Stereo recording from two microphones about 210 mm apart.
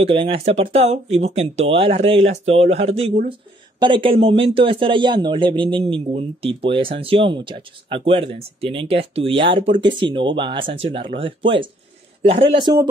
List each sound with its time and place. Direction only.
0.0 s speech: 25° right (ahead or behind)